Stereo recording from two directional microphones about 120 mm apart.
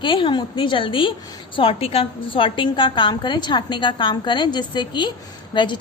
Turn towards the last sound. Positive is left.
turn(degrees=40)  # may be behind; listen again after turning